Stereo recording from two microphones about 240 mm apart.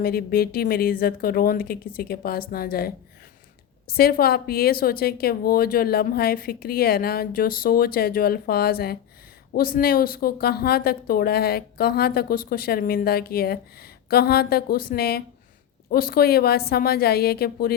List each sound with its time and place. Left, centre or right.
0.0 s a woman's voice: left